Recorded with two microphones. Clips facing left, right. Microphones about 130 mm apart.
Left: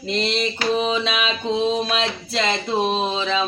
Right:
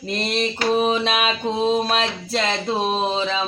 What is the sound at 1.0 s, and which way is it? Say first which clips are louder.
Music: right 1 dB; 45° right (ahead or behind).